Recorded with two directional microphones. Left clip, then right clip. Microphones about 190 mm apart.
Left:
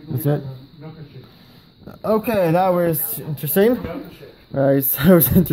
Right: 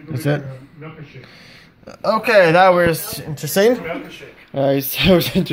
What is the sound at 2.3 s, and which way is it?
Speech, 35° left (ahead or behind).